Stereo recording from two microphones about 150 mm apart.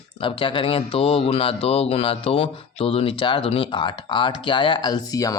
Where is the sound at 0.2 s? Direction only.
35° left (ahead or behind).